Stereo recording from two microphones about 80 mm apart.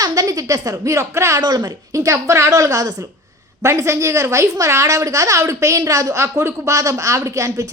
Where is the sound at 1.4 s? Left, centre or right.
Right.